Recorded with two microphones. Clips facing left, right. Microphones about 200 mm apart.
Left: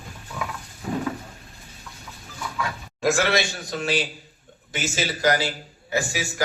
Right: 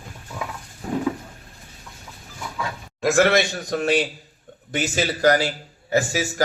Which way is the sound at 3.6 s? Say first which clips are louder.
Right 5 dB; 60° right (ahead or behind).